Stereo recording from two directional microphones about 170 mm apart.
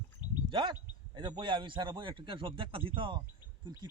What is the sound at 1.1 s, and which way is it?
A man's voice, 30° right (ahead or behind).